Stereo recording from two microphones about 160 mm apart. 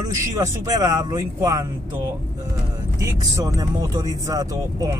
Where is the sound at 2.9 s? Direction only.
25° right (ahead or behind).